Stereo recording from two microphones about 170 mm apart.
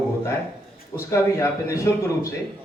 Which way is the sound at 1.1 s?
20° left (ahead or behind).